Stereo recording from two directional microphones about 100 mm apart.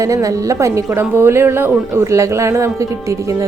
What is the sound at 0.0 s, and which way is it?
A woman's voice, 35° right (ahead or behind).